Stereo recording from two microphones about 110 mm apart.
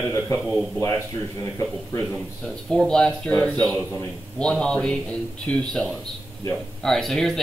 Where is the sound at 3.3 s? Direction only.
15° left (ahead or behind).